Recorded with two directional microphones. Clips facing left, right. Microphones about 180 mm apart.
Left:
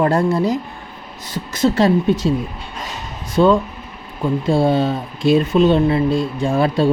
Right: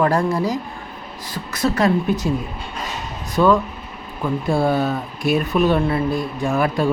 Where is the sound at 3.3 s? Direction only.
30° left (ahead or behind).